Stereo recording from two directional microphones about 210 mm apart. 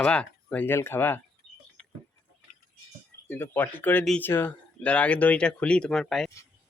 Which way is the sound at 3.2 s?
10° left (ahead or behind).